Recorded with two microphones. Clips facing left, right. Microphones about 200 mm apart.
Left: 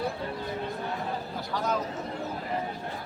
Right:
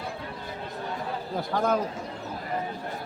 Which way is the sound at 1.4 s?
55° right (ahead or behind).